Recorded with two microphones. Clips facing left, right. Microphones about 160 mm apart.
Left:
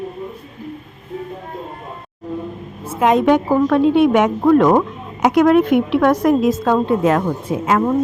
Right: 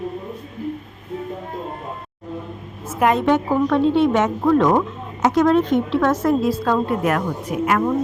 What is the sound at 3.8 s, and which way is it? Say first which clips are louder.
A woman's voice: left 4 dB; 15° left (ahead or behind).